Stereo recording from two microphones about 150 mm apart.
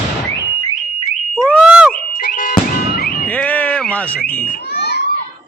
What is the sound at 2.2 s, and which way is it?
Music, 65° left (ahead or behind).